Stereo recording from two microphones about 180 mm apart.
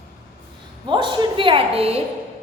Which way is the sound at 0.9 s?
25° right (ahead or behind).